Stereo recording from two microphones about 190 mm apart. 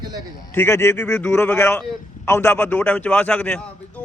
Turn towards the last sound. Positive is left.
turn(degrees=5)  # may be behind; listen again after turning